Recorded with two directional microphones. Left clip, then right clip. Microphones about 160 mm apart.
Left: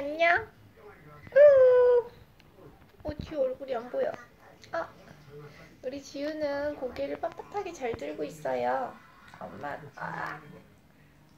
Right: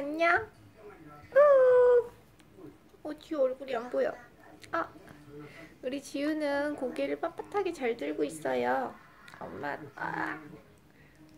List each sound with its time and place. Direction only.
0.1 s a sound: 30° right (ahead or behind)
1.3 s baby cry: 30° right (ahead or behind)
3.0 s a woman's voice: 25° right (ahead or behind)
4.6 s speech: 60° right (ahead or behind)
5.9 s a woman's voice: 65° right (ahead or behind); by 10.3 s 50° right (ahead or behind)